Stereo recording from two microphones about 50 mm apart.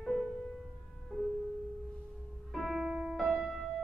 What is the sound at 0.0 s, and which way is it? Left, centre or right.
Music, centre.